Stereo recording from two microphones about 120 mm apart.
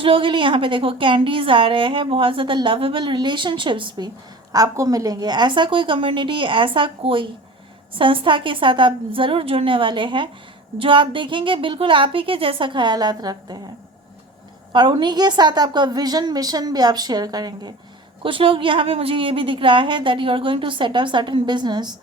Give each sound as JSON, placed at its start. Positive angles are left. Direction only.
{"t": 0.0, "sound": "a woman's voice", "side_deg": -45}
{"t": 4.5, "sound": "a woman's voice", "side_deg": -30}
{"t": 14.7, "sound": "a woman's voice", "side_deg": -40}
{"t": 18.2, "sound": "a woman's voice", "side_deg": -45}